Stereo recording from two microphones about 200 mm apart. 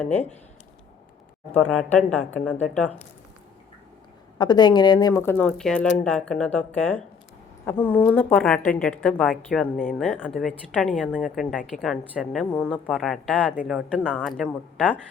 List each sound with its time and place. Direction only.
0.0 s a woman's voice: 10° left (ahead or behind)
1.7 s a woman's voice: 5° left (ahead or behind)
4.4 s a woman's voice: 20° left (ahead or behind); by 15.0 s 5° left (ahead or behind)